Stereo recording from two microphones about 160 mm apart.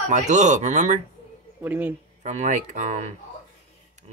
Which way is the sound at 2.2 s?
50° right (ahead or behind).